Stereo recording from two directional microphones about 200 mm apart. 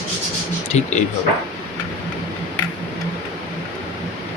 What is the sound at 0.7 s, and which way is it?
Speech, 35° left (ahead or behind).